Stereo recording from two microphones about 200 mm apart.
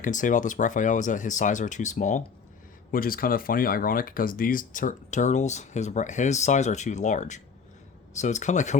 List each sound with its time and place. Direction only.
0.0 s speech: 40° left (ahead or behind)